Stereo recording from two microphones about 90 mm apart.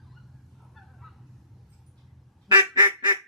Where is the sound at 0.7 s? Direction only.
Centre (ahead or behind).